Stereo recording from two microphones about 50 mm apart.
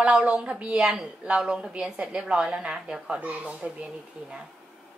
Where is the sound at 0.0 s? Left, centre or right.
Right.